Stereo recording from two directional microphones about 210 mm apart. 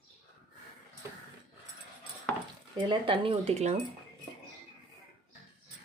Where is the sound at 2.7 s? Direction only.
25° right (ahead or behind).